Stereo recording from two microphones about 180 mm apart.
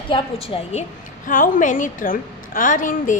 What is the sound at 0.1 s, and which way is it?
Speech, 30° left (ahead or behind).